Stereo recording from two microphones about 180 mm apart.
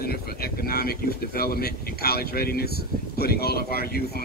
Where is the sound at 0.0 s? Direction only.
60° left (ahead or behind).